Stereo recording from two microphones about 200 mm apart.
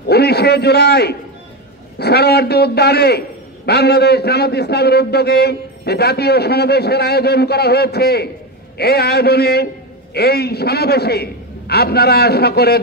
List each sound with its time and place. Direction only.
0.0 s a man's voice: 55° left (ahead or behind)